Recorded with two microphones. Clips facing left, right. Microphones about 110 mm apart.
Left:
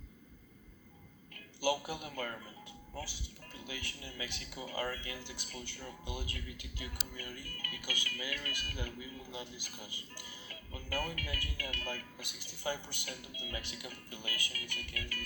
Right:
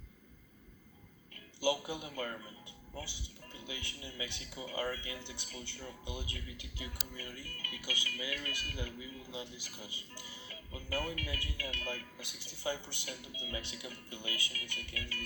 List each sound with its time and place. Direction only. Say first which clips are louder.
1.6 s speech: even; 20° right (ahead or behind)